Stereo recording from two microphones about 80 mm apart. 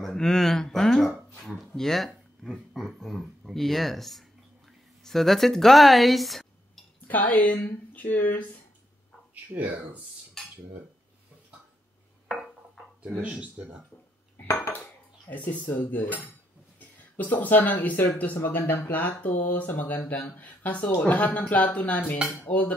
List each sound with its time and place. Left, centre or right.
0.0 s speech: centre
7.1 s speech: left
9.3 s speech: right
13.2 s speech: centre
14.3 s dishes: left
14.7 s dishes: left
17.0 s speech: left